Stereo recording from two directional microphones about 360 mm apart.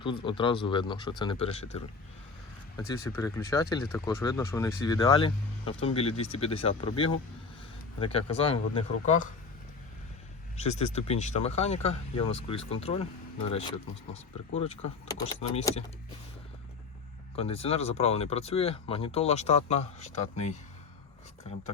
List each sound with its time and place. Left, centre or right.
0.0 s speech: centre
3.1 s speech: centre
10.6 s speech: centre
15.0 s speech: centre
17.3 s speech: centre